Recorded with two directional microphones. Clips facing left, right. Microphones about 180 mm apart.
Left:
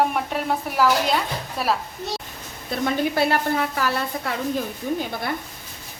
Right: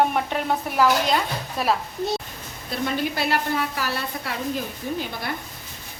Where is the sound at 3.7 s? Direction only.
50° left (ahead or behind).